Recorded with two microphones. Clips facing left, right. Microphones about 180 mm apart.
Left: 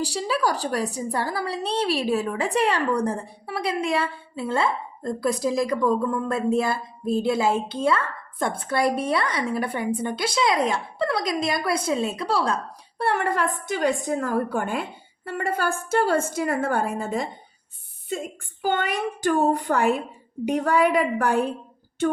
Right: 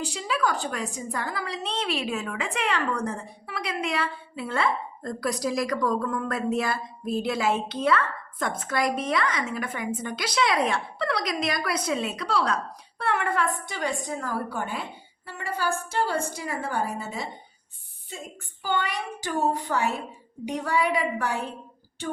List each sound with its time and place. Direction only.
0.0 s a woman's voice: 35° left (ahead or behind)
18.6 s a woman's voice: 50° left (ahead or behind)